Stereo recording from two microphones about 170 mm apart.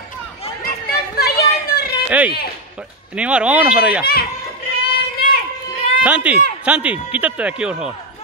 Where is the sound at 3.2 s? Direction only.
5° right (ahead or behind).